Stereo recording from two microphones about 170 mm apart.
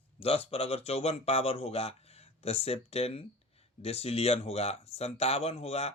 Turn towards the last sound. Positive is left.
turn(degrees=35)  # may be behind; listen again after turning